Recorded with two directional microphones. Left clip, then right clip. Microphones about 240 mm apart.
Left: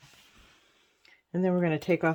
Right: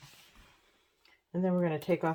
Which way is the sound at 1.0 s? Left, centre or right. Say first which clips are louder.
Left 4 dB; left.